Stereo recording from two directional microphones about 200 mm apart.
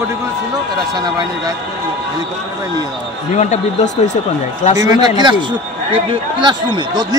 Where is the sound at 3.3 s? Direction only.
35° left (ahead or behind).